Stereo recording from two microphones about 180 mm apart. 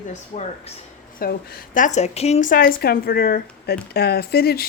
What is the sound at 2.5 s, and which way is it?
Speech, 55° left (ahead or behind).